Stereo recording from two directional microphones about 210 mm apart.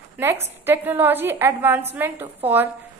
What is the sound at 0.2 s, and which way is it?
A woman's voice, 10° right (ahead or behind).